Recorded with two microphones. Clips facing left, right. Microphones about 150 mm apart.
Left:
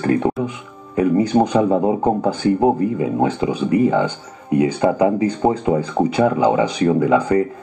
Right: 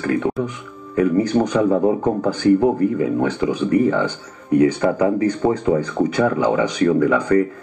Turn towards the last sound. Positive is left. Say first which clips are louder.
# left 1 dB
turn(degrees=20)  # may be behind; listen again after turning